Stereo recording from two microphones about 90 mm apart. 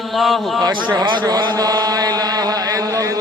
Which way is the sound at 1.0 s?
60° right (ahead or behind).